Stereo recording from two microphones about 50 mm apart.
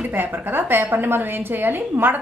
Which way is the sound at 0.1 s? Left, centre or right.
Right.